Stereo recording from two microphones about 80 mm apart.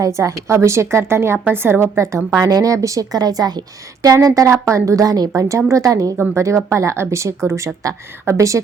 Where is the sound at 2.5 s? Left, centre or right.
Right.